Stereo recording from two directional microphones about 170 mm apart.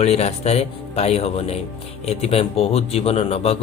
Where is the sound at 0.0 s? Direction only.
40° left (ahead or behind).